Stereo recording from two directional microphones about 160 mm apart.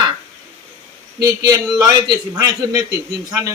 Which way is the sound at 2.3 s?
20° right (ahead or behind).